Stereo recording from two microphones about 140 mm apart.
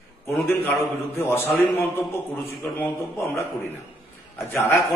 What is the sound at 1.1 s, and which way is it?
Speech, 15° left (ahead or behind).